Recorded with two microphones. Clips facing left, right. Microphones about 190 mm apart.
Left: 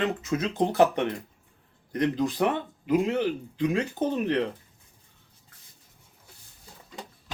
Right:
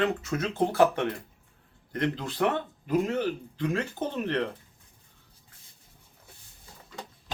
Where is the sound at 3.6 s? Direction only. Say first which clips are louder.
Left 4 dB; 15° left (ahead or behind).